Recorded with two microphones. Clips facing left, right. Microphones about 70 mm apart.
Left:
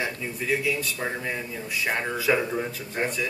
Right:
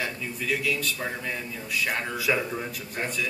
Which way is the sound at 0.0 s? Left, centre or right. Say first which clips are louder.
Left 2 dB; left.